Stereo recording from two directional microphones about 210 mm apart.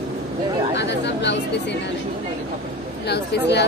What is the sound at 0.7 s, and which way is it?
Chatter, 55° left (ahead or behind).